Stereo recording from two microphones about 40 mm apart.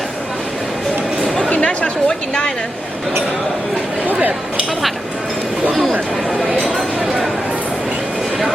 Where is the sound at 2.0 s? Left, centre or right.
Centre.